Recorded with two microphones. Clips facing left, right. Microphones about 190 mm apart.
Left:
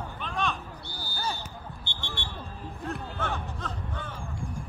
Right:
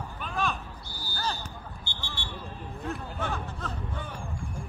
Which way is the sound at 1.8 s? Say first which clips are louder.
Left 2 dB; 20° left (ahead or behind).